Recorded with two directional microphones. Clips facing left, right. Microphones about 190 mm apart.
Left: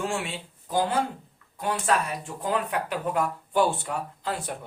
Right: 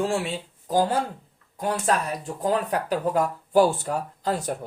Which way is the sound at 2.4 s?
35° right (ahead or behind).